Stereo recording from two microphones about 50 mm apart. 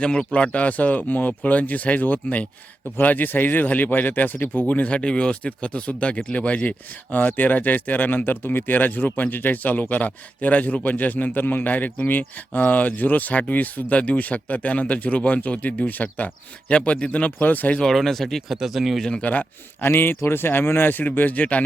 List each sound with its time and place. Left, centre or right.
0.0 s speech: centre; by 17.7 s left
17.7 s speech: centre
19.2 s speech: left
20.0 s speech: left